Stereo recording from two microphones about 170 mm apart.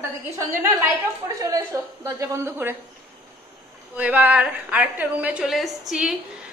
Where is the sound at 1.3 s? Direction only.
20° right (ahead or behind).